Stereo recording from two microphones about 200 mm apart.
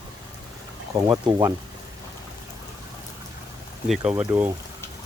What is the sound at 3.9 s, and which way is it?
Speech, 5° right (ahead or behind).